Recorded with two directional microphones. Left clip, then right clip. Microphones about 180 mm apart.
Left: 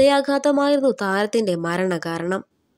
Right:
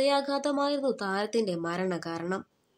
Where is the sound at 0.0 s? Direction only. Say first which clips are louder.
Left 10 dB; 45° left (ahead or behind).